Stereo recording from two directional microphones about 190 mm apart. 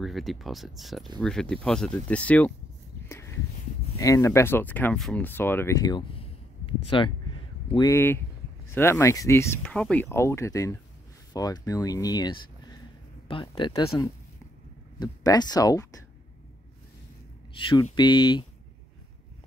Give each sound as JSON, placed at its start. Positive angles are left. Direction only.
{"t": 0.0, "sound": "speech", "side_deg": 0}
{"t": 3.1, "sound": "a sound", "side_deg": 15}
{"t": 4.0, "sound": "speech", "side_deg": 15}
{"t": 9.6, "sound": "speech", "side_deg": 5}
{"t": 17.9, "sound": "speech", "side_deg": 25}